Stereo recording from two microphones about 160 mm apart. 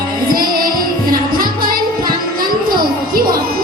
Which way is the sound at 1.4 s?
65° right (ahead or behind).